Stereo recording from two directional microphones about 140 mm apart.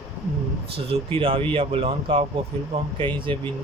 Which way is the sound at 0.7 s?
40° right (ahead or behind).